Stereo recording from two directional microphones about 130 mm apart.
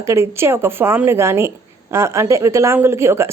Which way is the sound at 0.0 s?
20° right (ahead or behind).